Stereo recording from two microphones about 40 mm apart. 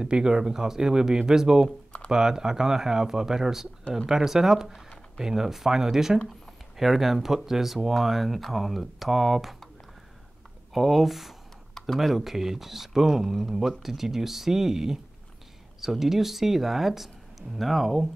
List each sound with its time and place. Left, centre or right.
0.0 s speech: right
10.7 s speech: centre